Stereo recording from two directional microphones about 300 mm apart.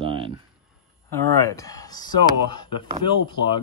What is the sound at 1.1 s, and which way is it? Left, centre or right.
Speech, centre.